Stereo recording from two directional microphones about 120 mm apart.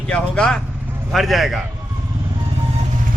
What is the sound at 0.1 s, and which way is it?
A man's voice, 5° left (ahead or behind).